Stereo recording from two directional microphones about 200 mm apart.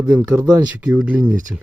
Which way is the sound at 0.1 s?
10° right (ahead or behind).